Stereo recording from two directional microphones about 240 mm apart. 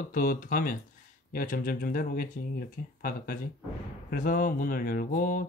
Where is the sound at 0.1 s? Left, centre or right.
Left.